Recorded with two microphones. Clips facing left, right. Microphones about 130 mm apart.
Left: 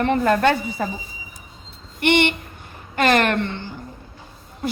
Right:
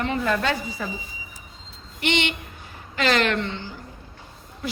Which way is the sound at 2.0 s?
55° left (ahead or behind).